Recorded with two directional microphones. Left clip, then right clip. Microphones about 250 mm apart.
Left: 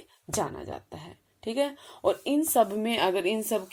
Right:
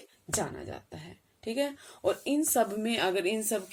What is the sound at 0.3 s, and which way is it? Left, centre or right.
Speech, left.